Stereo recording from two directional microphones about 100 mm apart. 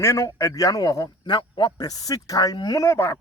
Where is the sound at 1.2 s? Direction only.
50° left (ahead or behind).